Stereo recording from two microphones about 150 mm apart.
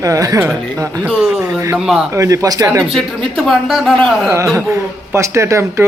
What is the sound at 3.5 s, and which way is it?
Speech, centre (ahead or behind).